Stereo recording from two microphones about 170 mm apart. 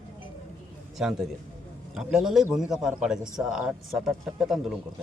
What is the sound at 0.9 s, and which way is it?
Speech, centre (ahead or behind).